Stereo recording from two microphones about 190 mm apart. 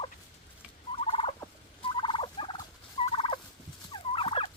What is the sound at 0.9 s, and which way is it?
Fowl, 30° left (ahead or behind).